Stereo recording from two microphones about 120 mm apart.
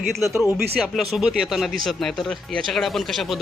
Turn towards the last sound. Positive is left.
turn(degrees=0)  # may be behind; listen again after turning